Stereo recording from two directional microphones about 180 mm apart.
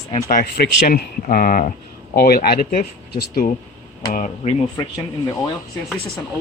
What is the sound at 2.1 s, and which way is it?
Speech, 60° left (ahead or behind).